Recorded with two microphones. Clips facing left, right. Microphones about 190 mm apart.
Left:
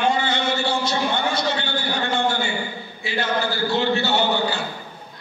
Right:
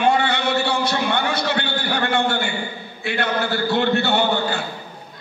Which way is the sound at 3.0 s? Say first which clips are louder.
Right 1 dB; 60° right (ahead or behind).